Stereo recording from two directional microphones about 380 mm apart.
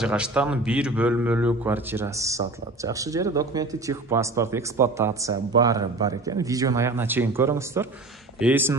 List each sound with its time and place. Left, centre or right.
0.0 s a man's voice: centre